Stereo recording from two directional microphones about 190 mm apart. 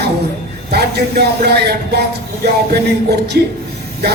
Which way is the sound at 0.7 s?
55° right (ahead or behind).